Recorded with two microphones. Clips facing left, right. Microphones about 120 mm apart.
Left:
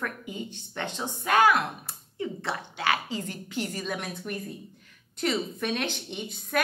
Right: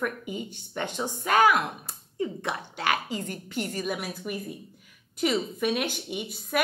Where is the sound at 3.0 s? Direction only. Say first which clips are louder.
Right 1 dB; 45° right (ahead or behind).